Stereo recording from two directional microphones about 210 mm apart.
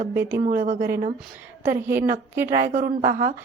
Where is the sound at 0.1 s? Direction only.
10° right (ahead or behind).